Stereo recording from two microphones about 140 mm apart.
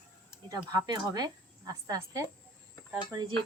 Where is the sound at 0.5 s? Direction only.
25° right (ahead or behind).